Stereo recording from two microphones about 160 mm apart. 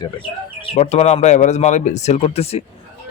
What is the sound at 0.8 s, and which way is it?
A man's voice, 45° left (ahead or behind).